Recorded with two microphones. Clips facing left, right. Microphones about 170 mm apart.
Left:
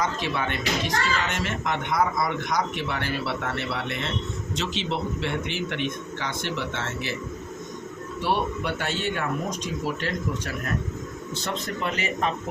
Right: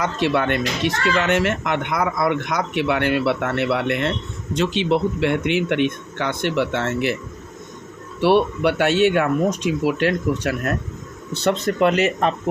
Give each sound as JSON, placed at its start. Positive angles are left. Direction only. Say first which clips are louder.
{"t": 0.0, "sound": "speech", "louder": "right 7 dB", "side_deg": -70}
{"t": 8.2, "sound": "speech", "louder": "right 10 dB", "side_deg": -75}
{"t": 11.4, "sound": "speech", "louder": "right 13 dB", "side_deg": -80}